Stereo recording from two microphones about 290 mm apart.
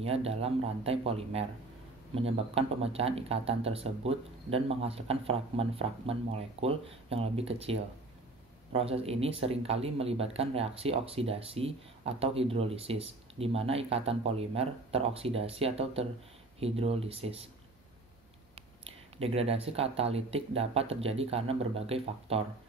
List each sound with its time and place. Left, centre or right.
0.0 s speech: centre
18.5 s speech: centre